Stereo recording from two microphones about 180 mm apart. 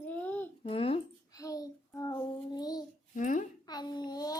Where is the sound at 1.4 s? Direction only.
20° left (ahead or behind).